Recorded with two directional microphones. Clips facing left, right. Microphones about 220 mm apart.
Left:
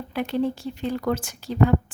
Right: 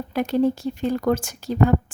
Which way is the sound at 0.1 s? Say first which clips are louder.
Right 4 dB; 40° right (ahead or behind).